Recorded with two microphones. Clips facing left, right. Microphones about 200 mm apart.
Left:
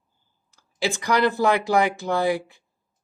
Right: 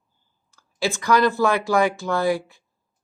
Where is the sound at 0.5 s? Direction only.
15° left (ahead or behind).